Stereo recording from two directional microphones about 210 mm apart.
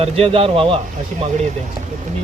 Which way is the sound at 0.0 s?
30° right (ahead or behind).